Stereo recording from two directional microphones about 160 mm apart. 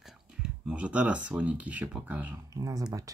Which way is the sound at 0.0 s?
5° right (ahead or behind).